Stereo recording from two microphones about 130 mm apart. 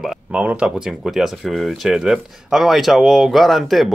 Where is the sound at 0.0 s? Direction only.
5° right (ahead or behind).